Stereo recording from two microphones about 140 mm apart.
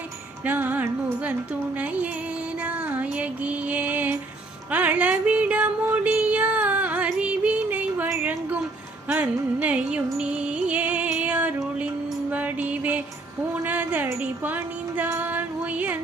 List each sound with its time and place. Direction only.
0.4 s music: 10° right (ahead or behind)
2.6 s music: 10° right (ahead or behind)